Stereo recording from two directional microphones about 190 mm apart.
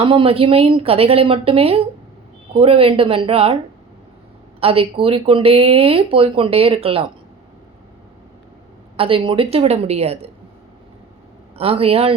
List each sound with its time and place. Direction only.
0.0 s speech: 25° right (ahead or behind)
4.6 s speech: 30° right (ahead or behind)
9.0 s speech: 30° right (ahead or behind)
11.5 s a man's voice: 30° right (ahead or behind)